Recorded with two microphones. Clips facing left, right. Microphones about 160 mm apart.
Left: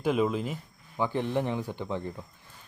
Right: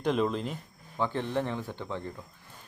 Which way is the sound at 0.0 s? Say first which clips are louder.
Left 1 dB; 5° left (ahead or behind).